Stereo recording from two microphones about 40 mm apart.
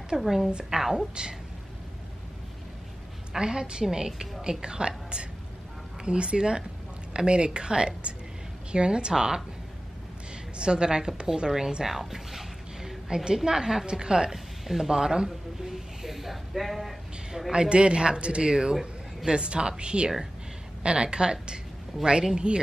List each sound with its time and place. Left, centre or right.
0.2 s a woman's voice: centre
3.3 s a woman's voice: centre
15.2 s speech: centre
17.5 s a woman's voice: right